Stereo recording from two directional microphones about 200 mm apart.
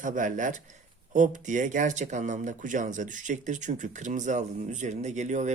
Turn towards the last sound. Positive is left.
turn(degrees=-35)  # may be behind; listen again after turning